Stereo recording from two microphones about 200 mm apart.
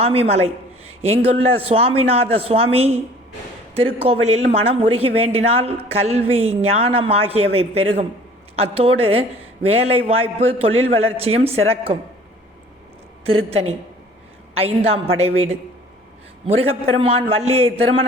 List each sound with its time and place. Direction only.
0.0 s a woman's voice: 30° right (ahead or behind)
13.2 s a woman's voice: 30° right (ahead or behind)
14.9 s speech: 30° right (ahead or behind)
16.9 s speech: 30° right (ahead or behind)